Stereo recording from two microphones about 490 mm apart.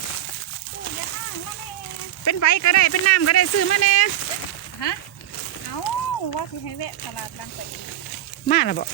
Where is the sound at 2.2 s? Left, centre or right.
Left.